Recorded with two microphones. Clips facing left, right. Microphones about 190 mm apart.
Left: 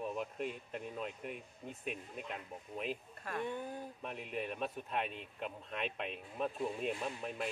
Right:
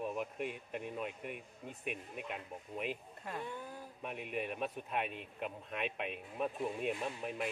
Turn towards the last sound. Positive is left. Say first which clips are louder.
# right 1 dB
turn(degrees=-10)  # may be behind; listen again after turning